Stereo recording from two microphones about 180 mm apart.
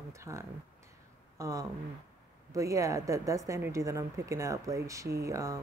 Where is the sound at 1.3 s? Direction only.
20° right (ahead or behind).